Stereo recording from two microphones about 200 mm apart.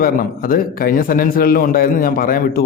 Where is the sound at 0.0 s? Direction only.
45° left (ahead or behind).